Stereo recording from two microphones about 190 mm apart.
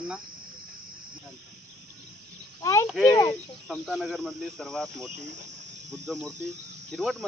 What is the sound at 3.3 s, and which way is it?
Speech, 5° left (ahead or behind).